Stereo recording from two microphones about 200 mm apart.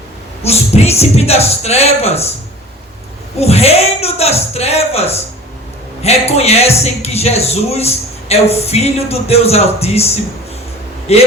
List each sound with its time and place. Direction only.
0.4 s speech: 30° left (ahead or behind)
3.3 s speech: 30° left (ahead or behind)